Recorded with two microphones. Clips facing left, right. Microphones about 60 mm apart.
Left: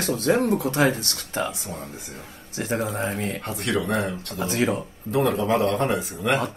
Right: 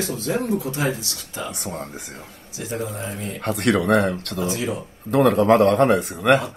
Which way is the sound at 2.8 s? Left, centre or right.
Left.